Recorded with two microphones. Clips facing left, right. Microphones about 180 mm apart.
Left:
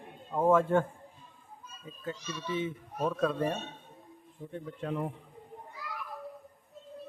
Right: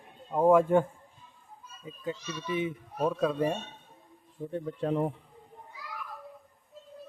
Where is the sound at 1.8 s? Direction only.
15° right (ahead or behind).